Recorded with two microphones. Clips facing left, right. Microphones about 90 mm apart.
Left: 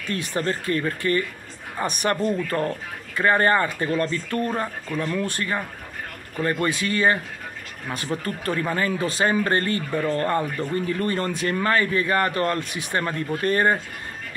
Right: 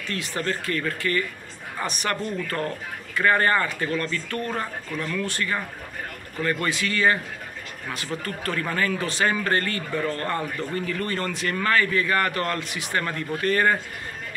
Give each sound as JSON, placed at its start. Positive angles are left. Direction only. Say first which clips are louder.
{"t": 0.4, "sound": "speech", "louder": "left 3 dB", "side_deg": 30}
{"t": 6.4, "sound": "speech", "louder": "left 2 dB", "side_deg": 20}